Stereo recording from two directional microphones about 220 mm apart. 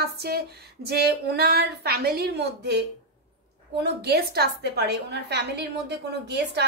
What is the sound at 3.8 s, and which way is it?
A woman's voice, 45° right (ahead or behind).